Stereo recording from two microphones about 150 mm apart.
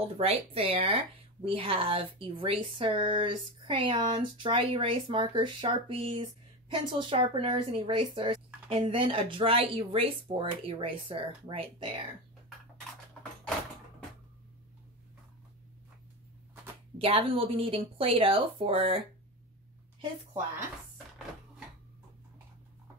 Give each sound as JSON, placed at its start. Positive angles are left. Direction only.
{"t": 0.0, "sound": "speech", "side_deg": -40}
{"t": 17.0, "sound": "speech", "side_deg": -40}